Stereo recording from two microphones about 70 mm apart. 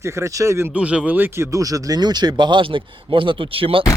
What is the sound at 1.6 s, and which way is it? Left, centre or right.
Speech, right.